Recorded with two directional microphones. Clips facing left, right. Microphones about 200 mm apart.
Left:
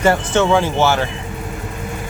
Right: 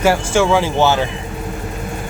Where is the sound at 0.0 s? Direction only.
5° right (ahead or behind).